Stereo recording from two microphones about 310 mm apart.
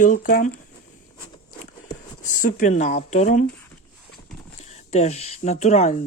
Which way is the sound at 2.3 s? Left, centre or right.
Left.